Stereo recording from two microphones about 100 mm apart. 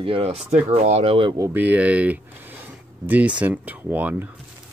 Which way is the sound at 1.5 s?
15° right (ahead or behind).